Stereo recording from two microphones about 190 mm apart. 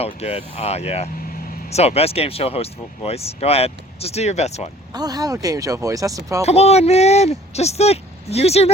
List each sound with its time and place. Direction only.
0.0 s speech: 35° left (ahead or behind)
4.9 s speech: 20° right (ahead or behind)
6.4 s speech: 35° left (ahead or behind)